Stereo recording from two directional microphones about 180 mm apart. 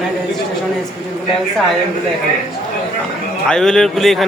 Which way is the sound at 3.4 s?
5° left (ahead or behind).